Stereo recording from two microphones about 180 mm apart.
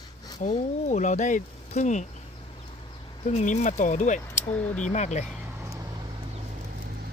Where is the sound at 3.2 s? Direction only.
40° left (ahead or behind).